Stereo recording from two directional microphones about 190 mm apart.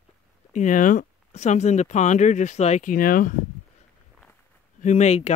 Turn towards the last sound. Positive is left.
turn(degrees=35)  # may be behind; listen again after turning